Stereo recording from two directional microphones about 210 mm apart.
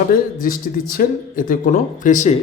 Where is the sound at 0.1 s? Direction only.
40° left (ahead or behind).